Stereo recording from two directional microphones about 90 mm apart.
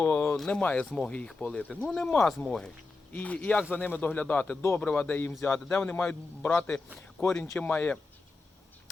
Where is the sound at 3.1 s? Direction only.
15° left (ahead or behind).